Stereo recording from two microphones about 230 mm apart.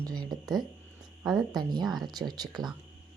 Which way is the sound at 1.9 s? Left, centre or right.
Centre.